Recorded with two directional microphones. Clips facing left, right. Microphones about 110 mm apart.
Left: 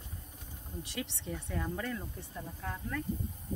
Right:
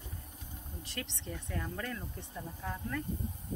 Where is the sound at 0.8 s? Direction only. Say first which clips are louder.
Left 2 dB; 10° left (ahead or behind).